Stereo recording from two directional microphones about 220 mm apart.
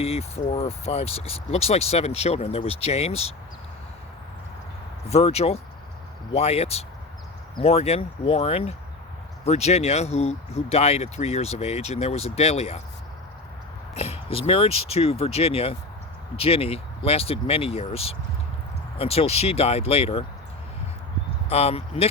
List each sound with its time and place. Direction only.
0.0 s speech: 30° left (ahead or behind)
5.0 s speech: 30° left (ahead or behind)
13.9 s speech: 25° left (ahead or behind)
21.5 s speech: 25° left (ahead or behind)